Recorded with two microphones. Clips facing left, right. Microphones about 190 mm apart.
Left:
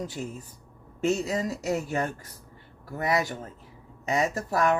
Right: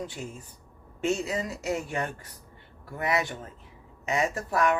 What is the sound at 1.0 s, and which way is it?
Speech, 40° left (ahead or behind).